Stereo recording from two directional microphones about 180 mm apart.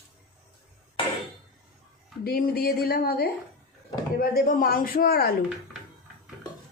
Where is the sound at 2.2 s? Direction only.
55° left (ahead or behind).